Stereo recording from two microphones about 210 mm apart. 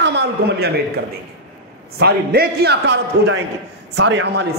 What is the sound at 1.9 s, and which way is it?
A man's voice, 50° right (ahead or behind).